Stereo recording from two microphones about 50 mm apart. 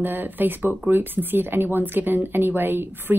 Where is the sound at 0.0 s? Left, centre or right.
Right.